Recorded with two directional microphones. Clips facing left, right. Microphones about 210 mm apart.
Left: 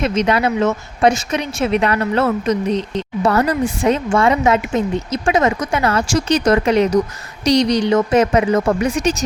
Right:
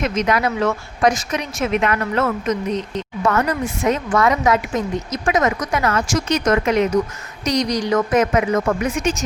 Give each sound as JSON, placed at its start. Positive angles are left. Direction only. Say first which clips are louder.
{"t": 0.0, "sound": "a woman's voice", "louder": "left 3 dB", "side_deg": 30}